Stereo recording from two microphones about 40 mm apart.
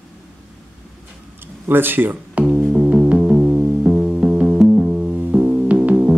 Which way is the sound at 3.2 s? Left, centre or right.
Right.